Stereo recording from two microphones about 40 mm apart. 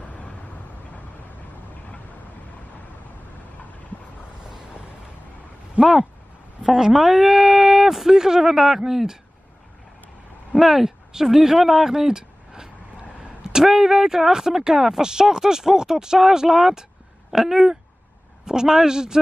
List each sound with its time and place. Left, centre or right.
5.8 s speech: right
6.7 s speech: centre
10.5 s a man's voice: centre